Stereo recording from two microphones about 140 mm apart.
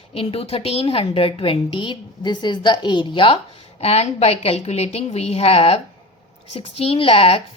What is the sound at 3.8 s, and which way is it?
A woman's voice, 45° left (ahead or behind).